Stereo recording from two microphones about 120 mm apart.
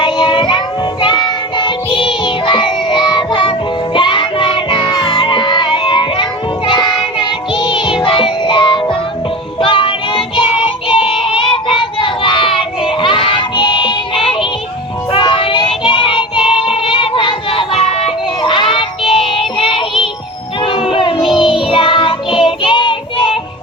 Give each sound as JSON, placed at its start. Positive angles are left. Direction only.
{"t": 0.0, "sound": "child singing", "side_deg": 40}
{"t": 1.0, "sound": "music", "side_deg": 40}
{"t": 6.7, "sound": "child singing", "side_deg": 40}
{"t": 7.2, "sound": "music", "side_deg": 45}
{"t": 10.8, "sound": "child singing", "side_deg": 45}
{"t": 20.6, "sound": "music", "side_deg": 45}
{"t": 21.3, "sound": "child singing", "side_deg": 45}